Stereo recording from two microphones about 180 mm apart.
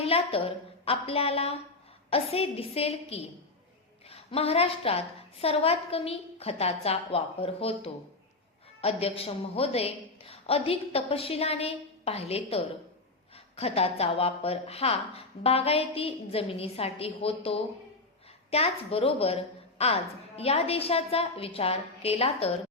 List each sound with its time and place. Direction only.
0.0 s speech: 30° left (ahead or behind)
18.5 s speech: 35° left (ahead or behind)